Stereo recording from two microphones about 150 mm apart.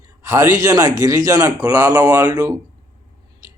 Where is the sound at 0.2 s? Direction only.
20° right (ahead or behind).